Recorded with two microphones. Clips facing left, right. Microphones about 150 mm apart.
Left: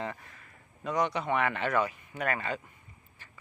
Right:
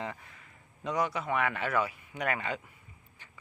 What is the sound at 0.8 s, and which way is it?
Speech, 5° right (ahead or behind).